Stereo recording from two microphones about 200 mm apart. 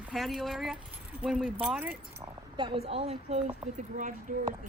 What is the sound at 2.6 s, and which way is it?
A woman's voice, 25° right (ahead or behind).